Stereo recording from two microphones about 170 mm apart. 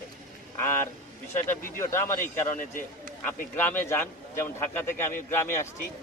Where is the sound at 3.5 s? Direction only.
10° left (ahead or behind).